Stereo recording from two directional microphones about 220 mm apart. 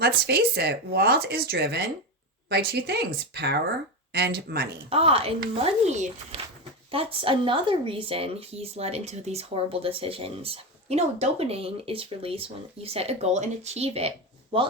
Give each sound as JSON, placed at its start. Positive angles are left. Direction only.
{"t": 0.0, "sound": "speech", "side_deg": -45}
{"t": 4.9, "sound": "speech", "side_deg": -25}